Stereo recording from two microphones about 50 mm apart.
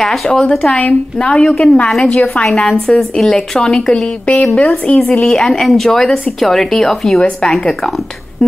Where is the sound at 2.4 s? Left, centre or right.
Left.